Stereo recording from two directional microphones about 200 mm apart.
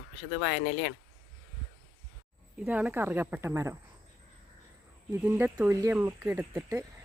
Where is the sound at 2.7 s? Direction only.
10° right (ahead or behind).